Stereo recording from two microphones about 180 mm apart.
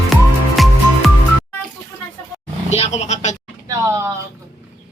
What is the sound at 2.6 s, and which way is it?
Vehicle, 35° left (ahead or behind).